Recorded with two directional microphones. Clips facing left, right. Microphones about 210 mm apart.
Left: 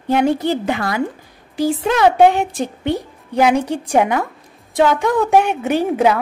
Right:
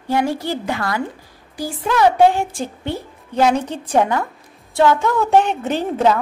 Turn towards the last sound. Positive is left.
turn(degrees=10)  # may be behind; listen again after turning